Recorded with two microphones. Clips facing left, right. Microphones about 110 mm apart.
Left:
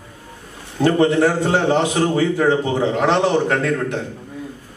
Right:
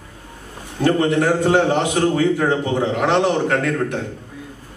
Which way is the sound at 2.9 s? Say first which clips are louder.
Left 1 dB; 20° left (ahead or behind).